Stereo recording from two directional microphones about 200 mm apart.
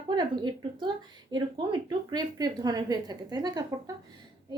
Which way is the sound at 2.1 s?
20° right (ahead or behind).